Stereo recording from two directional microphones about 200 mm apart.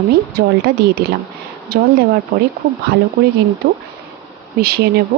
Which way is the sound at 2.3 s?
35° right (ahead or behind).